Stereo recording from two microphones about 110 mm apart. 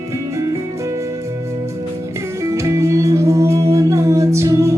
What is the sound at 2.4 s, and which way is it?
Music, 25° right (ahead or behind).